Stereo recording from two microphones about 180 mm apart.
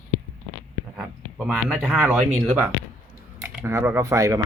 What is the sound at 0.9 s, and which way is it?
Speech, centre (ahead or behind).